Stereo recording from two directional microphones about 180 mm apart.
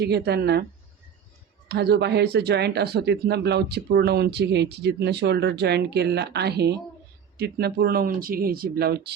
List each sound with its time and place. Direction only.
0.0 s speech: 65° right (ahead or behind)
1.6 s speech: 65° right (ahead or behind)